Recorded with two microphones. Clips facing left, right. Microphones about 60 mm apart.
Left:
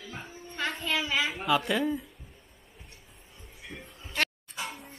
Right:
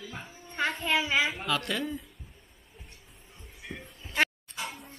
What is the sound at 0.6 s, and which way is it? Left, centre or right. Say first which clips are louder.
Child singing: right 3 dB; right.